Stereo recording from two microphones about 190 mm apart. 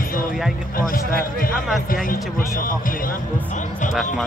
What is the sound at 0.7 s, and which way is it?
Speech, 50° left (ahead or behind).